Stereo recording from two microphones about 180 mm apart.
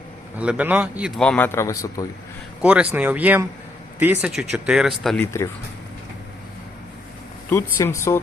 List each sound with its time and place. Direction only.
0.3 s speech: 10° right (ahead or behind)
1.2 s a man's voice: 10° left (ahead or behind)
2.6 s speech: 5° right (ahead or behind)
5.2 s a man's voice: 15° left (ahead or behind)
7.5 s a man's voice: 15° left (ahead or behind)